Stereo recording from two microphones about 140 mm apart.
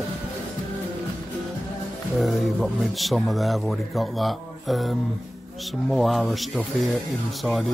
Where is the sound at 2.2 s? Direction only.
Centre (ahead or behind).